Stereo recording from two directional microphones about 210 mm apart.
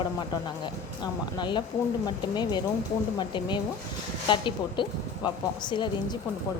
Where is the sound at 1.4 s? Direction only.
20° left (ahead or behind).